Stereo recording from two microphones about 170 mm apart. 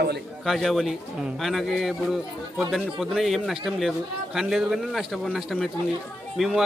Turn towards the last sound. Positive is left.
turn(degrees=0)  # may be behind; listen again after turning